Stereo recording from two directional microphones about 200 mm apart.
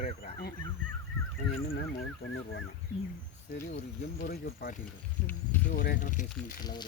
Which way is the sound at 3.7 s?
50° left (ahead or behind).